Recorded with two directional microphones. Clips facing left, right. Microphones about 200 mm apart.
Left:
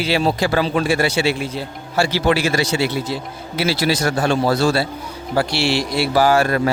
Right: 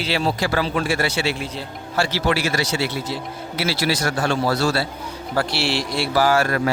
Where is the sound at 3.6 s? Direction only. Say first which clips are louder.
Left 4 dB; 20° left (ahead or behind).